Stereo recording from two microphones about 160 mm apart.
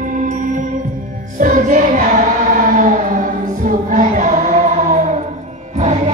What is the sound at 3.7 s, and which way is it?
Music, 55° right (ahead or behind).